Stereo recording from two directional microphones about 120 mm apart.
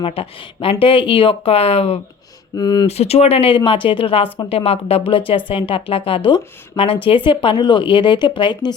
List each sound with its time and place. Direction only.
0.0 s speech: 50° left (ahead or behind)
2.6 s speech: 35° left (ahead or behind)
2.8 s speech: 60° left (ahead or behind); by 8.7 s 40° left (ahead or behind)